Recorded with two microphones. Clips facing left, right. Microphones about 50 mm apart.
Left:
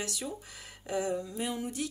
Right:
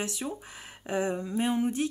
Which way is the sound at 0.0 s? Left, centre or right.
Right.